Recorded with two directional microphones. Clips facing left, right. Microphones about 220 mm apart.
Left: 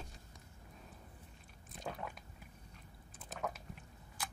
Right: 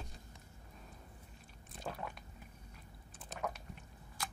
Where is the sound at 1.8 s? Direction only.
5° right (ahead or behind).